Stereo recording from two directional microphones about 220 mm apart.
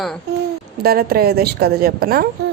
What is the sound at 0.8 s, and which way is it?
A woman's voice, 45° right (ahead or behind).